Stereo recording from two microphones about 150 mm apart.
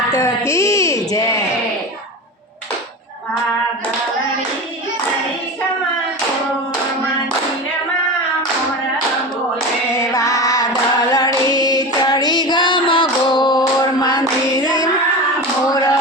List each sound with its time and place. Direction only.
0.1 s speech: 20° left (ahead or behind)
10.0 s female singing: 25° left (ahead or behind)
15.7 s a sound: 25° left (ahead or behind)